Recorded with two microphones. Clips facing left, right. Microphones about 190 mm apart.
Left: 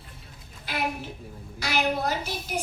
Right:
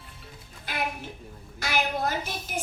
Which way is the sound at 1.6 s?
50° right (ahead or behind).